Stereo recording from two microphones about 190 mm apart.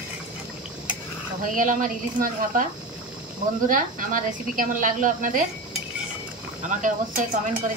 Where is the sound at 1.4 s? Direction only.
45° right (ahead or behind).